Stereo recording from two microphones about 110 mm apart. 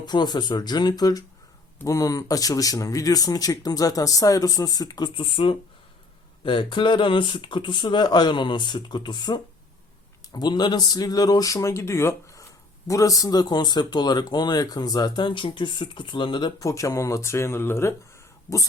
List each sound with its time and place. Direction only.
0.0 s speech: 40° left (ahead or behind)
5.1 s speech: 55° left (ahead or behind)
16.6 s speech: 30° left (ahead or behind)